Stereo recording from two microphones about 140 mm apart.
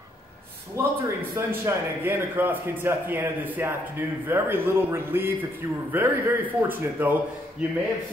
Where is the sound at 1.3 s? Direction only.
15° right (ahead or behind).